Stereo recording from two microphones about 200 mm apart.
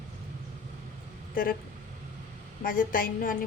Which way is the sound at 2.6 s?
45° left (ahead or behind).